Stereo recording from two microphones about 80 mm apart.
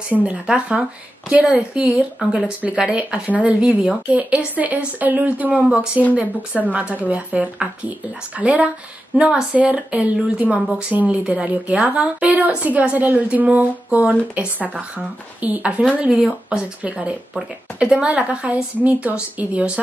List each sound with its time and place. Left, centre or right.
0.1 s a woman's voice: centre